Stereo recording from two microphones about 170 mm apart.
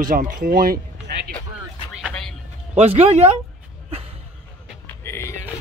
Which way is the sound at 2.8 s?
40° right (ahead or behind).